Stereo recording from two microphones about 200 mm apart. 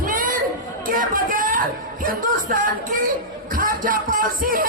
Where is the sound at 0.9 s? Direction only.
45° right (ahead or behind).